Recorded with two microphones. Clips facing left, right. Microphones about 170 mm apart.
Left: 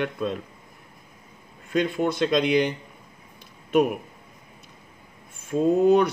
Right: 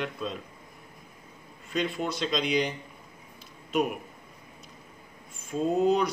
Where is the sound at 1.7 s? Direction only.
50° left (ahead or behind).